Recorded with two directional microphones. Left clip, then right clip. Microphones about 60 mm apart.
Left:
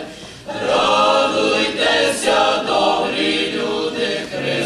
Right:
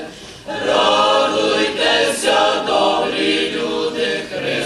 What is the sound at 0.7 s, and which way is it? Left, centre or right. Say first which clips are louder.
Choir: right 1 dB; right.